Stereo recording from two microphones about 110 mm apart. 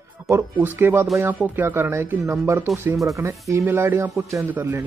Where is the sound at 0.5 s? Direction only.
15° right (ahead or behind).